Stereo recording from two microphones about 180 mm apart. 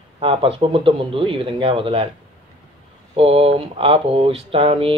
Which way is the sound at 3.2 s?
30° right (ahead or behind).